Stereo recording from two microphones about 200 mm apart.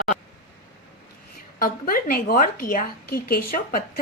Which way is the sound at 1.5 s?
45° left (ahead or behind).